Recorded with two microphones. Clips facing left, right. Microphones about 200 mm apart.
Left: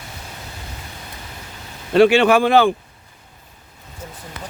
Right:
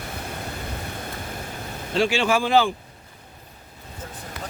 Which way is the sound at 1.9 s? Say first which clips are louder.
Left 9 dB; 60° left (ahead or behind).